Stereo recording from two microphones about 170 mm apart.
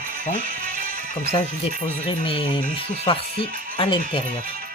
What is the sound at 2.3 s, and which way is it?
Speech, 30° left (ahead or behind).